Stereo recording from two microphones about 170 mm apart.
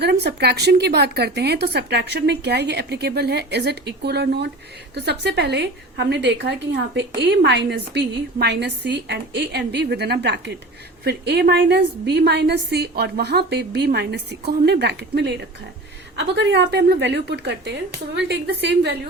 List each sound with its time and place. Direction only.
0.0 s a woman's voice: 80° right
11.0 s speech: 75° right (ahead or behind)
16.1 s a woman's voice: 90° right